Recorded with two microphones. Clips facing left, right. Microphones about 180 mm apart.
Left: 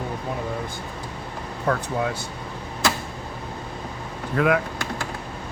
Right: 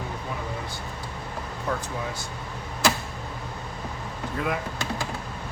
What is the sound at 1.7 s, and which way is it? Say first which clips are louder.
Speech: left 6 dB; 60° left (ahead or behind).